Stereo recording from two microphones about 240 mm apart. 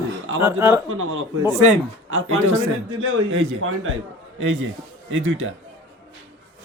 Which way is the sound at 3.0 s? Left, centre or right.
Right.